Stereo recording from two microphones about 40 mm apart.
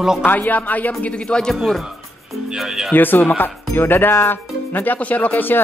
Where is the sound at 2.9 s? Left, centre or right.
Left.